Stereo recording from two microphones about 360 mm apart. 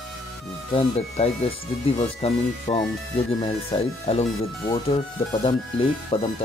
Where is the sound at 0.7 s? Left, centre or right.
Centre.